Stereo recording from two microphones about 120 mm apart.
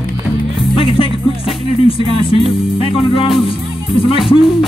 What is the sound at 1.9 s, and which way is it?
Music, 50° left (ahead or behind).